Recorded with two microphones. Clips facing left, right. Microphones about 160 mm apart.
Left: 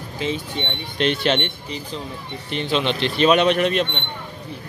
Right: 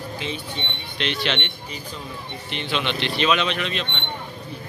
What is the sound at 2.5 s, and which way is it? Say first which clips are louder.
Speech: left 5 dB; 35° left (ahead or behind).